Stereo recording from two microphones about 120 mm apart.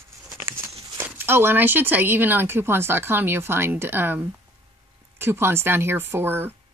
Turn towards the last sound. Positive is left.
turn(degrees=-20)  # may be behind; listen again after turning